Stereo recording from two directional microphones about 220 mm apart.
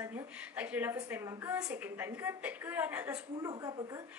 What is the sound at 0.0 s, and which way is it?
A woman's voice, 10° right (ahead or behind).